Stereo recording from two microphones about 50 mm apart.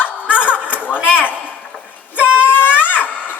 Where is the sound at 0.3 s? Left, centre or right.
Right.